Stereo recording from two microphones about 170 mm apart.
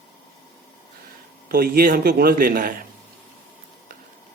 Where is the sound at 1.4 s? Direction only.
60° right (ahead or behind).